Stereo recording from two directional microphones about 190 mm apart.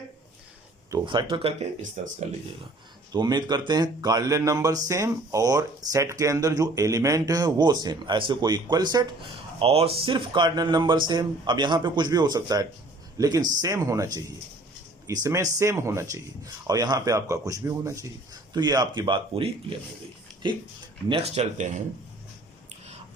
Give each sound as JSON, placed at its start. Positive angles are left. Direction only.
{"t": 0.9, "sound": "speech", "side_deg": -20}
{"t": 3.1, "sound": "a man's voice", "side_deg": -20}